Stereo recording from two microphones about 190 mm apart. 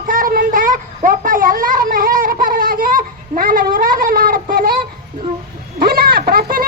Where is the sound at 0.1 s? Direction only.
50° right (ahead or behind).